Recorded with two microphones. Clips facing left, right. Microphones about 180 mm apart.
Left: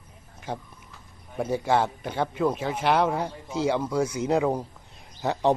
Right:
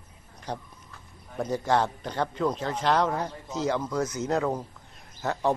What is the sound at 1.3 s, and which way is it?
A man's voice, 10° left (ahead or behind).